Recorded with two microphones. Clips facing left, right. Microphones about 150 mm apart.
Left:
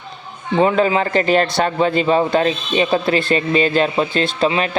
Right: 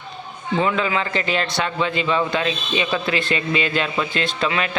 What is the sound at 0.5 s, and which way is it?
A man's voice, 35° left (ahead or behind).